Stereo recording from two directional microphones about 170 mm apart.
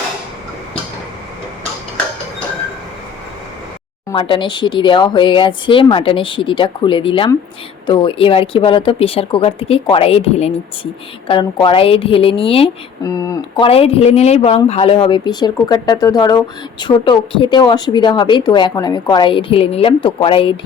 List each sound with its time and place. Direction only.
4.1 s a woman's voice: 30° left (ahead or behind)
13.0 s a woman's voice: 20° left (ahead or behind)
13.7 s a woman's voice: 35° left (ahead or behind)